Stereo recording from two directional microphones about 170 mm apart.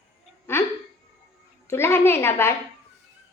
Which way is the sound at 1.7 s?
15° left (ahead or behind).